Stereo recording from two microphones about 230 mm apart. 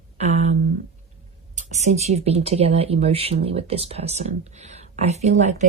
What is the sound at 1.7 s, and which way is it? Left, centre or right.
Speech, right.